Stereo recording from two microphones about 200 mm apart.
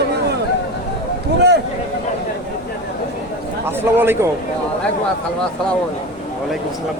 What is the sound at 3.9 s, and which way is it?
Speech, 10° right (ahead or behind).